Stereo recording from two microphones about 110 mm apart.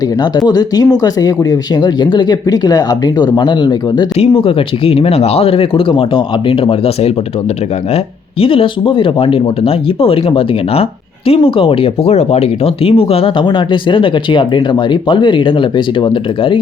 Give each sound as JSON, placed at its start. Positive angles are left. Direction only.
{"t": 0.2, "sound": "speech", "side_deg": 35}
{"t": 4.2, "sound": "speech", "side_deg": 55}
{"t": 12.1, "sound": "speech", "side_deg": 70}